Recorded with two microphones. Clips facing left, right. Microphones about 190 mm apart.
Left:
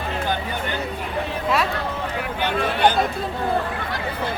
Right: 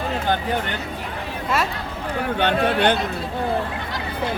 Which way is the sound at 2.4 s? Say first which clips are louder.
Right 1 dB; 65° right (ahead or behind).